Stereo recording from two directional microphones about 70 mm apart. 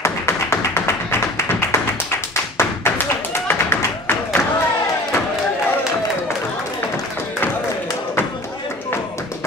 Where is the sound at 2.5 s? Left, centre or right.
Left.